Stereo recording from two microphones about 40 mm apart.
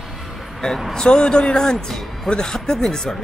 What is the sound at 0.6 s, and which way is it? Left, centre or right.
Speech, centre.